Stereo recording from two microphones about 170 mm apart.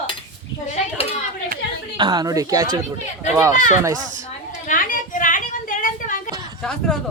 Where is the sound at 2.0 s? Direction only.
25° right (ahead or behind).